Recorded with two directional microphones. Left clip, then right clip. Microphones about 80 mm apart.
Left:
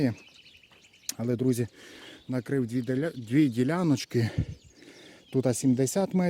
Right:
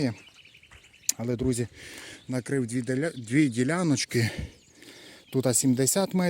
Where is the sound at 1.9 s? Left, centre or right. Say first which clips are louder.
Right 1 dB; centre; by 5.6 s left.